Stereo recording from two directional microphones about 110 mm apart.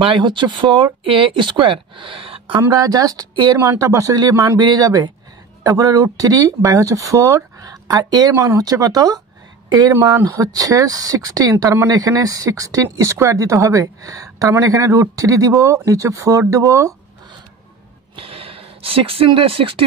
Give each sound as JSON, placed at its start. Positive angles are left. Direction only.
{"t": 0.0, "sound": "speech", "side_deg": -50}
{"t": 2.6, "sound": "speech", "side_deg": -35}
{"t": 18.1, "sound": "a sound", "side_deg": -55}